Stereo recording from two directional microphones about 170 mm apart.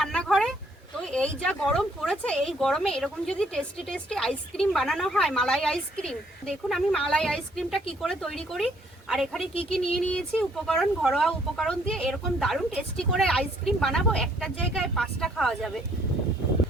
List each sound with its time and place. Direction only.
0.0 s a sound: 5° left (ahead or behind)
1.0 s speech: 5° left (ahead or behind)
9.5 s speech: 35° left (ahead or behind)
9.9 s speech: 5° left (ahead or behind)